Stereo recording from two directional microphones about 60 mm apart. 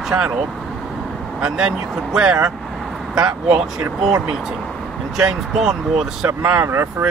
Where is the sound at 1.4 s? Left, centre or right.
Centre.